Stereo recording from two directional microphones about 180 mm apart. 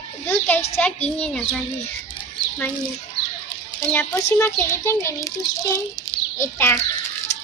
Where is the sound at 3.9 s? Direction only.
15° left (ahead or behind).